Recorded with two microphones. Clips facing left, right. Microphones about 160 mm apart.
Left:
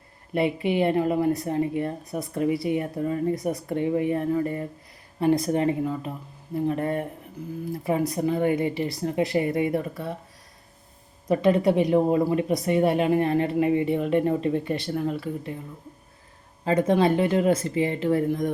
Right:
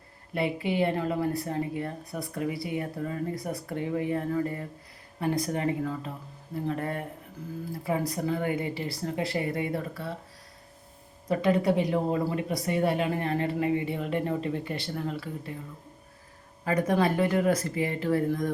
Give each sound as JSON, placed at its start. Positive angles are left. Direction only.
{"t": 0.3, "sound": "a woman's voice", "side_deg": 20}
{"t": 11.3, "sound": "a woman's voice", "side_deg": 20}
{"t": 16.6, "sound": "a woman's voice", "side_deg": 25}